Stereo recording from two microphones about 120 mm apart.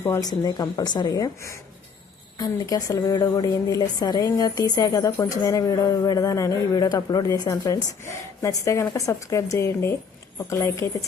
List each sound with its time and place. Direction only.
0.0 s a woman's voice: 25° left (ahead or behind)